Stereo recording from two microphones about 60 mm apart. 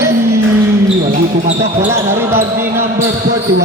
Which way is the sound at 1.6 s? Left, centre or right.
Right.